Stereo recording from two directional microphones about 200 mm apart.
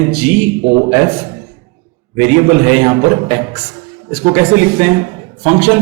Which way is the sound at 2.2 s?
15° right (ahead or behind).